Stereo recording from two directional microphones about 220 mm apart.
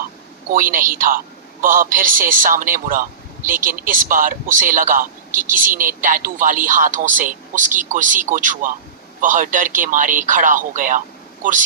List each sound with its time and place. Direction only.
0.4 s a man's voice: 40° right (ahead or behind)